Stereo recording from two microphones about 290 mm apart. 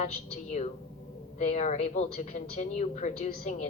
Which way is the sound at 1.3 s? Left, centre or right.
Left.